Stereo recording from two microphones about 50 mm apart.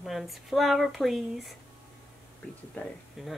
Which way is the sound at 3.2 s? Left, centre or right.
Centre.